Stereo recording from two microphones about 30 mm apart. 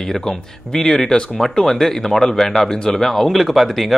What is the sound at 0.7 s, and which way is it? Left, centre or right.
Speech, centre.